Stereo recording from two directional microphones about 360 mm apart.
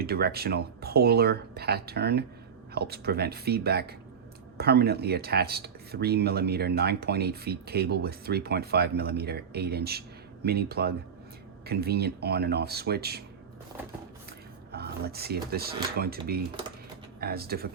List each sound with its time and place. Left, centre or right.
0.0 s speech: right
14.7 s speech: right